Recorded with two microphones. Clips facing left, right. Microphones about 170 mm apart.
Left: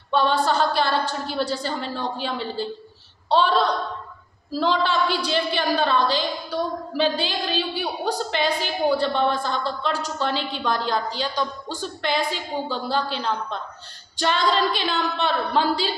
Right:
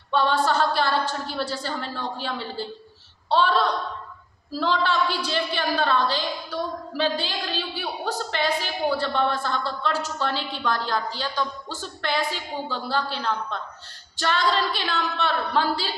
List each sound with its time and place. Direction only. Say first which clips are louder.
0.1 s a woman's voice: left 1 dB; 15° left (ahead or behind)
6.5 s a sound: left 3 dB; 15° left (ahead or behind)
7.8 s a woman's voice: left 3 dB; 15° left (ahead or behind)